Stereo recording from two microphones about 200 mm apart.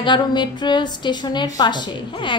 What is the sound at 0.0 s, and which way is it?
A woman's voice, 20° left (ahead or behind).